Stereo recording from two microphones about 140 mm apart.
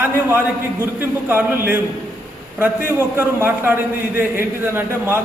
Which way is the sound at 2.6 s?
15° right (ahead or behind).